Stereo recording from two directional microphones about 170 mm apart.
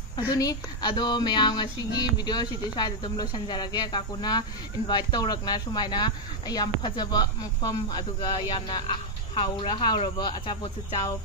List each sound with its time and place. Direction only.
0.3 s speech: 25° left (ahead or behind)